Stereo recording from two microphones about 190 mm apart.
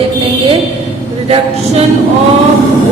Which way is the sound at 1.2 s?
30° right (ahead or behind).